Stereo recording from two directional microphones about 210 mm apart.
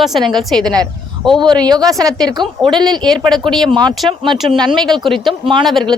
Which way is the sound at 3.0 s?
Centre (ahead or behind).